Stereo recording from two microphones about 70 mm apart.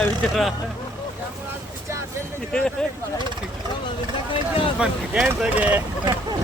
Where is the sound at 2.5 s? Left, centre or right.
Centre.